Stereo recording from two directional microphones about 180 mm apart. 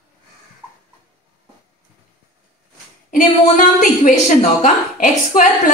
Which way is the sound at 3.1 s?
45° left (ahead or behind).